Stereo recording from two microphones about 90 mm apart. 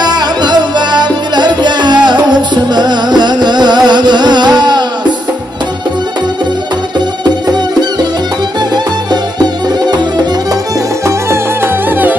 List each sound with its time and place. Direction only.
0.0 s music: 50° right (ahead or behind)
7.2 s music: 50° right (ahead or behind)
11.1 s music: 25° right (ahead or behind)